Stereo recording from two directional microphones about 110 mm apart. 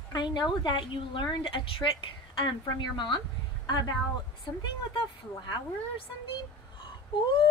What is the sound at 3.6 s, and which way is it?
Speech, 40° left (ahead or behind).